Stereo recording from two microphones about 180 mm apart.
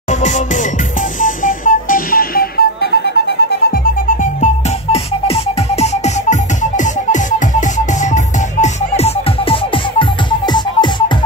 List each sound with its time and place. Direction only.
0.1 s music: 40° left (ahead or behind)
4.9 s music: 35° left (ahead or behind)